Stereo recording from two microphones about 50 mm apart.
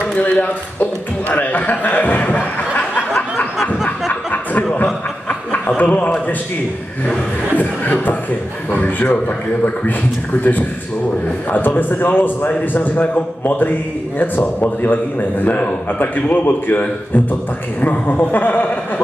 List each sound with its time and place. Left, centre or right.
0.1 s a man's voice: left
1.3 s chuckle: left
5.8 s a man's voice: left
7.5 s a man's voice: left
17.7 s a man's voice: left